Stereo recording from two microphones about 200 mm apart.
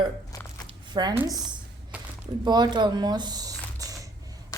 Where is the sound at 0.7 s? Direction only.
20° right (ahead or behind).